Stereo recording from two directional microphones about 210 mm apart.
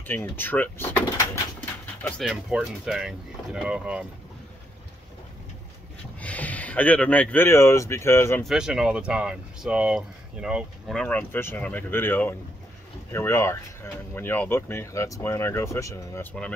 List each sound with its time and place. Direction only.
0.0 s speech: 10° left (ahead or behind)
2.0 s speech: centre (ahead or behind)
6.1 s speech: 5° left (ahead or behind)
8.5 s speech: centre (ahead or behind)